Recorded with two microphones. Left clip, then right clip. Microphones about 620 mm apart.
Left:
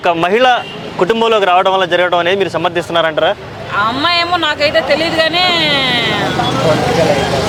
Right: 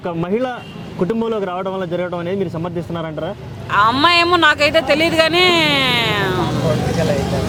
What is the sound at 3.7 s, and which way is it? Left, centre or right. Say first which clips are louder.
Speech: right 1 dB; right.